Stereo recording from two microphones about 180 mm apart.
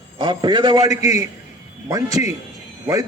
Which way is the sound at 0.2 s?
25° right (ahead or behind).